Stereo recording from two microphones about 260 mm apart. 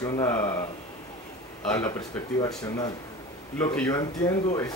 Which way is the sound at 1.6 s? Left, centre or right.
Centre.